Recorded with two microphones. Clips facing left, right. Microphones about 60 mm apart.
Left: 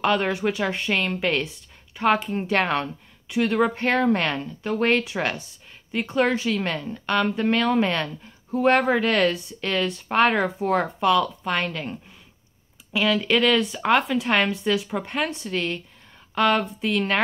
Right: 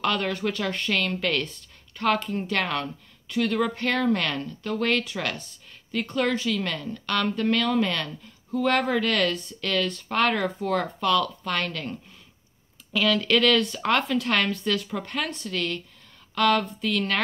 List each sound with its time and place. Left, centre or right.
0.0 s a woman's voice: left
14.3 s a woman's voice: centre